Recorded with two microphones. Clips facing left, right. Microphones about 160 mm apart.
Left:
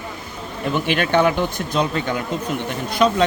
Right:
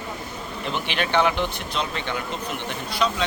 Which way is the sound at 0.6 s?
50° left (ahead or behind).